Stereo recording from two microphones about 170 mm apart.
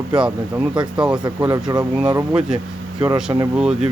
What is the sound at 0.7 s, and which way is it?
Speech, 25° right (ahead or behind).